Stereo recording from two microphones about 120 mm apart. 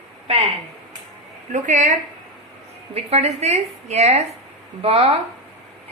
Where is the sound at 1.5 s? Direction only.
90° right.